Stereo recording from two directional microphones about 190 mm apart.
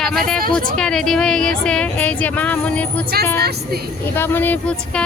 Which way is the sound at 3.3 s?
55° right (ahead or behind).